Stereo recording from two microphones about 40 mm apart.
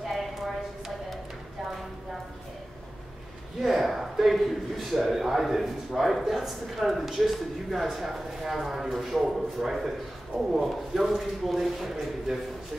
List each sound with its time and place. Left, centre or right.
0.0 s clip-clop: centre
3.6 s a man's voice: centre